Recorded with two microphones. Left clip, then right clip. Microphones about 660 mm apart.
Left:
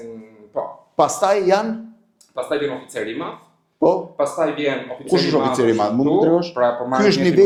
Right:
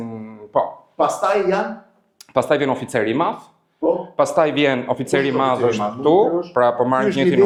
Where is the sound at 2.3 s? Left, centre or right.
Right.